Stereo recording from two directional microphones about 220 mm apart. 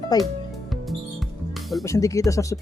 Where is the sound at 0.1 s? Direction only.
15° left (ahead or behind).